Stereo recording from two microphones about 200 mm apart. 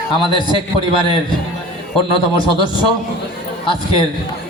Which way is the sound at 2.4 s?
25° left (ahead or behind).